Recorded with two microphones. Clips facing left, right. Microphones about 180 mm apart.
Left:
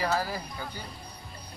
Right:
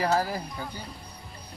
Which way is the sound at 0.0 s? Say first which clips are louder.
Right 3 dB; 35° right (ahead or behind).